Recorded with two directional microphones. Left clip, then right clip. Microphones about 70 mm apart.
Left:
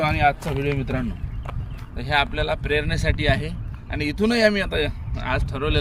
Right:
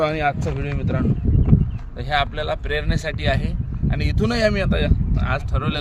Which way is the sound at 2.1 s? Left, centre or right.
Right.